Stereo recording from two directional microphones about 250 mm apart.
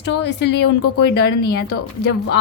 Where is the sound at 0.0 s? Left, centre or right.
Left.